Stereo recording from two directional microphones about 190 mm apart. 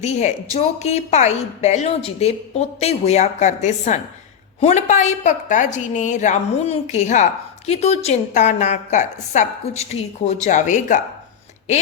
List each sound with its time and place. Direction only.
0.0 s a woman's voice: 35° left (ahead or behind)